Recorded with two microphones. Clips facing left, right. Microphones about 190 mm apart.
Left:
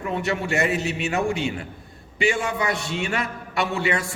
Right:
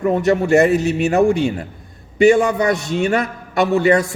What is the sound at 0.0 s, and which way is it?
A man's voice, 40° right (ahead or behind).